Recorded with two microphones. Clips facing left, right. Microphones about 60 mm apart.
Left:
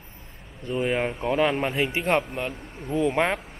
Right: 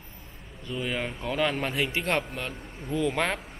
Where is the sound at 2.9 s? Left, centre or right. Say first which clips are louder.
Left 4 dB; centre.